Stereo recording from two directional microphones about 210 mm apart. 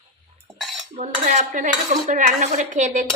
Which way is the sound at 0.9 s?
30° right (ahead or behind).